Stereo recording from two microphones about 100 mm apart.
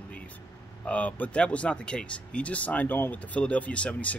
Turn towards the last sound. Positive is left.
turn(degrees=15)  # may be behind; listen again after turning